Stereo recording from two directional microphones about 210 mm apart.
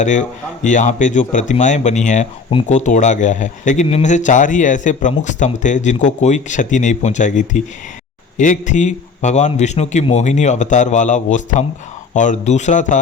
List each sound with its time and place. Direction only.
0.0 s a man's voice: 35° left (ahead or behind)